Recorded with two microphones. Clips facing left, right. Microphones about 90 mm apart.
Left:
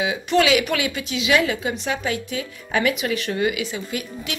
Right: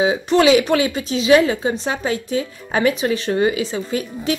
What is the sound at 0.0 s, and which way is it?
Speech, 30° right (ahead or behind).